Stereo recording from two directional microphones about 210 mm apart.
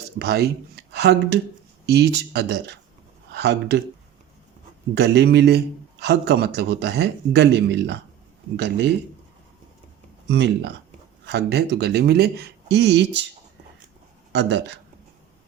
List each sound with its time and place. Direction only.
0.2 s a man's voice: 50° right (ahead or behind)
4.9 s a man's voice: 55° right (ahead or behind)
10.2 s a man's voice: 55° right (ahead or behind)
14.3 s speech: 55° right (ahead or behind)